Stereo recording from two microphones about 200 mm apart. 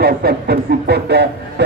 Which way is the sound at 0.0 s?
50° right (ahead or behind).